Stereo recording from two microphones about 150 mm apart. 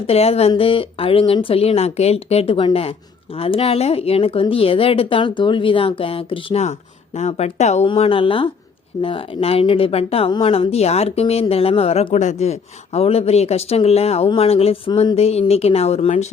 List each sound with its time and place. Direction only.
0.1 s speech: 40° left (ahead or behind)